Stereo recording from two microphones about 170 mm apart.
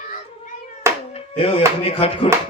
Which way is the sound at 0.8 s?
15° right (ahead or behind).